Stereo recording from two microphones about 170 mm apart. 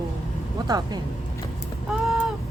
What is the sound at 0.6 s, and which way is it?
Speech, 20° right (ahead or behind).